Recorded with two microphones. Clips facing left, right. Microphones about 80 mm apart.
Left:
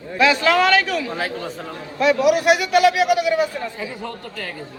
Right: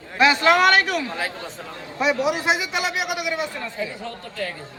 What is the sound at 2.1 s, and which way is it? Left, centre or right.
Speech, left.